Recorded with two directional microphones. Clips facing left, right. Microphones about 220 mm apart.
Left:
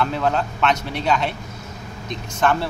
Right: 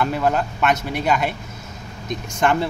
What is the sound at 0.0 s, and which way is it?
A man's voice, 10° right (ahead or behind).